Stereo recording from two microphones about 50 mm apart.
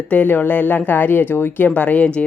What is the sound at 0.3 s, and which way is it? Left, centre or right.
A woman's voice, left.